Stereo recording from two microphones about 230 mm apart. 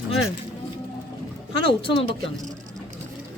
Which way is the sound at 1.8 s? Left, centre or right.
Left.